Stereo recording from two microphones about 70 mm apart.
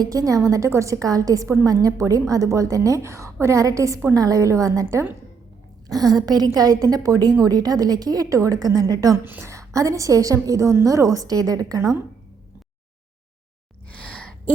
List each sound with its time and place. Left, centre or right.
0.0 s a woman's voice: right
5.9 s a woman's voice: right
9.1 s a woman's voice: right
9.5 s a woman's voice: right
13.9 s a sound: centre